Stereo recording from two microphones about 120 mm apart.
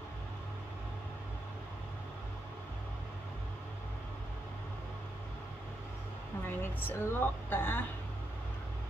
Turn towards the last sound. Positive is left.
turn(degrees=15)  # may be behind; listen again after turning